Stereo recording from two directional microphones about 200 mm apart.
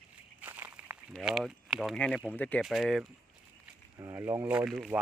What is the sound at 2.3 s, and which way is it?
Speech, 5° left (ahead or behind).